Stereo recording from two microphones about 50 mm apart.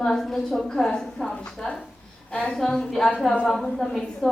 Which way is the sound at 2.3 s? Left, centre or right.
Left.